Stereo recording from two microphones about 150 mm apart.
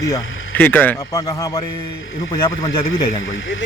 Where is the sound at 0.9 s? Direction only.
25° left (ahead or behind).